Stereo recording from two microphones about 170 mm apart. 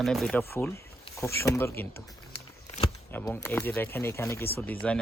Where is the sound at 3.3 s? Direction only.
10° left (ahead or behind).